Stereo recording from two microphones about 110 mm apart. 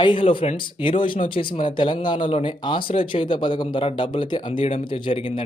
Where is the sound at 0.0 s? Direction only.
50° left (ahead or behind).